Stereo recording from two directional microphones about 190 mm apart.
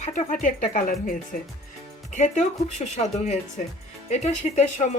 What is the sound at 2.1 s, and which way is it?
Speech, 40° left (ahead or behind).